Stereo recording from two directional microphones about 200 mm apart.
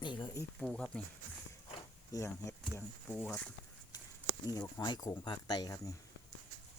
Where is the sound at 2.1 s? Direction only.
15° left (ahead or behind).